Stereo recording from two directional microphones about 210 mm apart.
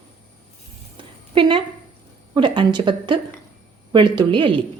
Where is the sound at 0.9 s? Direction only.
25° right (ahead or behind).